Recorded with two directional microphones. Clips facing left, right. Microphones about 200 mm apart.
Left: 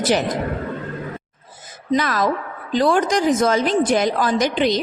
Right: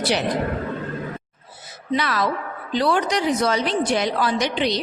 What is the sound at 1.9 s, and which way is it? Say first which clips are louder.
A woman's voice: left 3 dB; 45° left (ahead or behind).